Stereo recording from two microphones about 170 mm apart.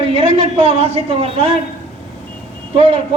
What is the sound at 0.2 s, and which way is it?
A woman's voice, 35° right (ahead or behind).